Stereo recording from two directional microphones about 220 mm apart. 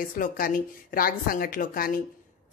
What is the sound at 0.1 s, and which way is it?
Speech, 40° left (ahead or behind).